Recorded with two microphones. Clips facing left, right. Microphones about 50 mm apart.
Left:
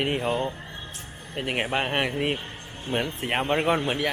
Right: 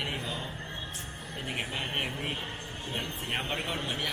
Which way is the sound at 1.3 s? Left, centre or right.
Left.